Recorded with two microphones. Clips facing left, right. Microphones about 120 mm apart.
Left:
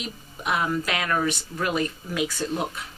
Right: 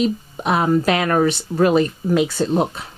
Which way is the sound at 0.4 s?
35° right (ahead or behind).